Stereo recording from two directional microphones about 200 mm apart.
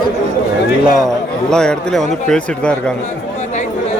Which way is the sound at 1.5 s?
5° left (ahead or behind).